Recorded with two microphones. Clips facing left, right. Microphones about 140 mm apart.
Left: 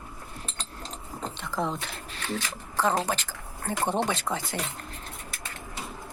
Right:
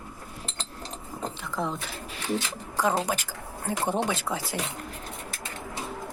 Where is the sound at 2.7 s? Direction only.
10° right (ahead or behind).